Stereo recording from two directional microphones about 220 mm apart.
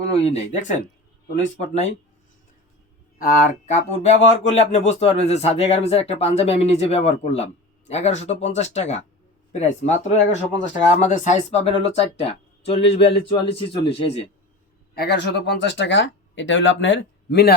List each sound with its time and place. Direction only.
0.1 s speech: 30° left (ahead or behind)
3.2 s speech: 40° left (ahead or behind)
14.9 s speech: 50° left (ahead or behind)